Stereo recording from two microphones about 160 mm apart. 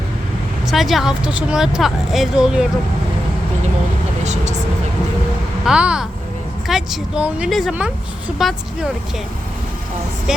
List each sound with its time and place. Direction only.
0.7 s speech: centre (ahead or behind)
4.2 s speech: 45° right (ahead or behind)
5.6 s speech: 5° right (ahead or behind)